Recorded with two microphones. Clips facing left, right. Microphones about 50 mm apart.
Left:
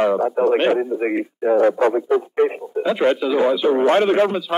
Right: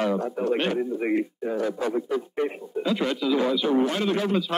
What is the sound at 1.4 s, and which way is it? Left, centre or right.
Speech, left.